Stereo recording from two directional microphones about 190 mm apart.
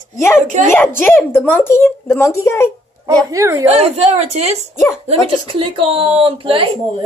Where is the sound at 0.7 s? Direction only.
10° left (ahead or behind).